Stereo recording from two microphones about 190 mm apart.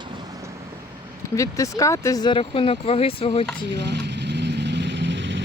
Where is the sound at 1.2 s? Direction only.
15° left (ahead or behind).